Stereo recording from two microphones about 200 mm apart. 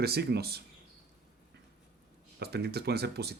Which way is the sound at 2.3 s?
55° right (ahead or behind).